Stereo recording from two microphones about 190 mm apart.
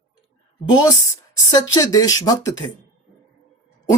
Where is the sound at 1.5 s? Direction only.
20° left (ahead or behind).